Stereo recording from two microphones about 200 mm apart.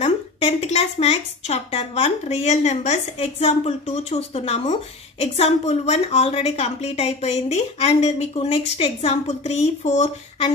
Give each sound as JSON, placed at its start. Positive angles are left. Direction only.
{"t": 0.0, "sound": "a woman's voice", "side_deg": 30}